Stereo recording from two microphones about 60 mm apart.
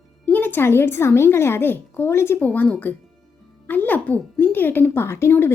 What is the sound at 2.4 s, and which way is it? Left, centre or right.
Speech, left.